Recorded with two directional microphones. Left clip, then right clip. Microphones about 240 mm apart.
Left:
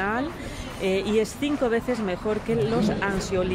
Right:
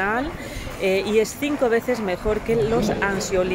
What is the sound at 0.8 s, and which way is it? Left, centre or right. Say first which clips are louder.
Speech: right 4 dB; centre.